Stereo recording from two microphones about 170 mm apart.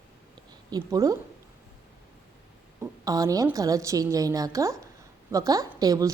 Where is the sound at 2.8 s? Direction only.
20° right (ahead or behind).